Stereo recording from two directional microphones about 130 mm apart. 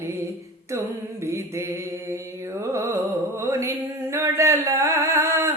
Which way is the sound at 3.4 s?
20° right (ahead or behind).